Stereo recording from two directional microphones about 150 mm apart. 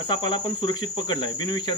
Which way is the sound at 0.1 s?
30° left (ahead or behind).